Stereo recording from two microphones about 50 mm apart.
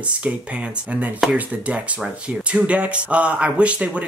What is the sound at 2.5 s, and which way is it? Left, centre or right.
Speech, right.